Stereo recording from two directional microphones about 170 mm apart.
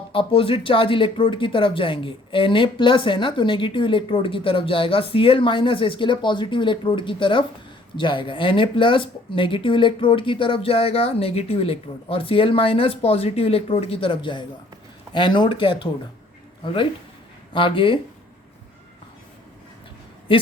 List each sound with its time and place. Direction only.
0.1 s speech: 30° left (ahead or behind)